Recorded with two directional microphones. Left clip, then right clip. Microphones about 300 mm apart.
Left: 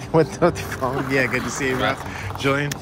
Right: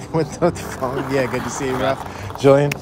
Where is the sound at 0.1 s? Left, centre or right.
Centre.